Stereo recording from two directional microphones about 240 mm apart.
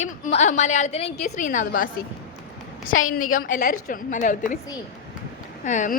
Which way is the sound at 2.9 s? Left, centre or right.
Left.